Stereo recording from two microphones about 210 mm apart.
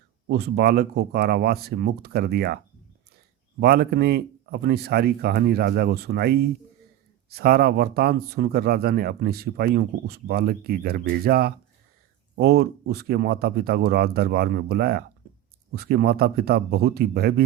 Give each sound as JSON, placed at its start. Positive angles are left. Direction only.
{"t": 0.3, "sound": "speech", "side_deg": -50}
{"t": 3.6, "sound": "speech", "side_deg": -50}
{"t": 15.2, "sound": "a sound", "side_deg": -45}
{"t": 15.7, "sound": "speech", "side_deg": -50}